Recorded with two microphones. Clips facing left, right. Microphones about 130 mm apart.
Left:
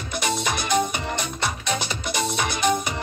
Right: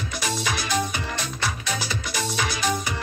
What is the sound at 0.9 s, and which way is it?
Music, 20° left (ahead or behind).